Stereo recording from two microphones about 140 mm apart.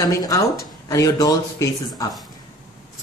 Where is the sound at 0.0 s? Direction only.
25° left (ahead or behind).